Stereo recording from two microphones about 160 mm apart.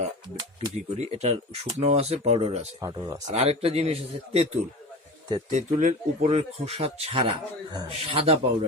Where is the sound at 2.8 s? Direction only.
20° right (ahead or behind).